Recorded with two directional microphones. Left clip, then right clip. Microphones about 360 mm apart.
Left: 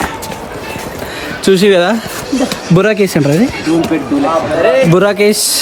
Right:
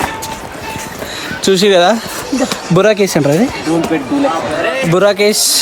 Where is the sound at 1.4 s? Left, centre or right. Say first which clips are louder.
Even; centre.